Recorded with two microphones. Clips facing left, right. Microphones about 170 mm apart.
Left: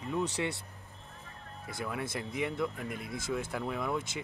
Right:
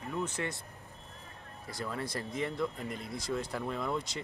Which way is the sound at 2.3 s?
5° left (ahead or behind).